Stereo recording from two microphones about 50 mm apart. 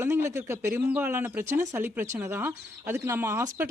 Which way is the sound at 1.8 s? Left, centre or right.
Right.